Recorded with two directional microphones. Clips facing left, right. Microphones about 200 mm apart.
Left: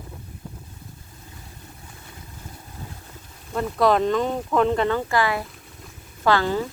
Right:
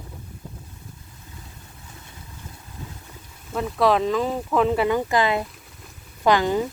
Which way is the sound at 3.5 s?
Centre (ahead or behind).